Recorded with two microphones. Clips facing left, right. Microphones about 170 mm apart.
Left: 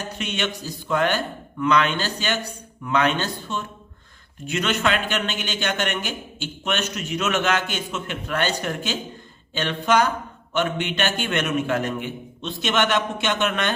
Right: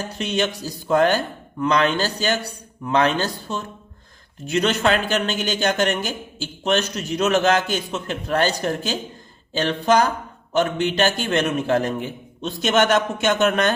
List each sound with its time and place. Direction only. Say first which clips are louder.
0.2 s a man's voice: right 6 dB; 35° right (ahead or behind)